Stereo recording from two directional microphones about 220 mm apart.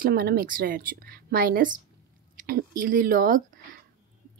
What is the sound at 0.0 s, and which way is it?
A woman's voice, 45° right (ahead or behind).